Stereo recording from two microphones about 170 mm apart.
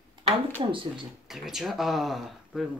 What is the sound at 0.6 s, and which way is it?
Speech, 30° right (ahead or behind).